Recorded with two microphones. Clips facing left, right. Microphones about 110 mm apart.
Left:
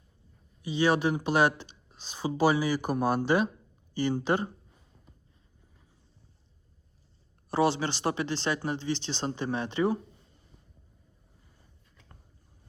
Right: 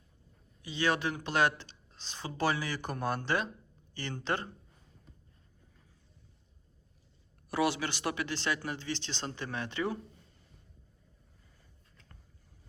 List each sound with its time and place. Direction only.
0.6 s speech: 15° left (ahead or behind)
7.5 s speech: 30° left (ahead or behind)